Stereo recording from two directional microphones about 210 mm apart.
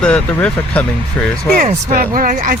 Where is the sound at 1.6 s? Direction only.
40° right (ahead or behind).